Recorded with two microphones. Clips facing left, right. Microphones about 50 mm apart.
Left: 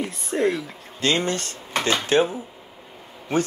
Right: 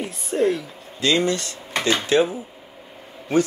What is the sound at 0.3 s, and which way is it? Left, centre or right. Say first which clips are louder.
Speech: right 2 dB; centre.